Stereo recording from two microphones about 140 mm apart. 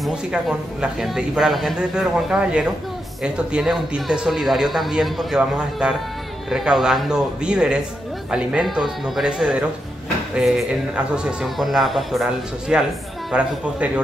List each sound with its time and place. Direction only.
0.0 s a man's voice: 5° right (ahead or behind)